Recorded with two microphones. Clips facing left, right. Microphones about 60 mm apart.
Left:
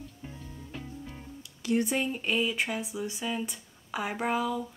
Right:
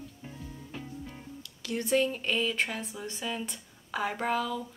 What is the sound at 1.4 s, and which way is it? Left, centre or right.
Speech, centre.